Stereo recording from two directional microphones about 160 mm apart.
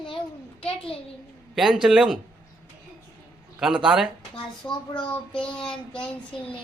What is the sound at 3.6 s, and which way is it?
Speech, 5° right (ahead or behind).